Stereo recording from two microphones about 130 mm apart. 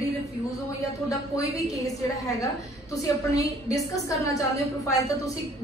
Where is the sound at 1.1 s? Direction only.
25° left (ahead or behind).